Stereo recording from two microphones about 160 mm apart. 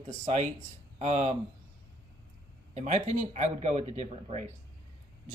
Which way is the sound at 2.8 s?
50° right (ahead or behind).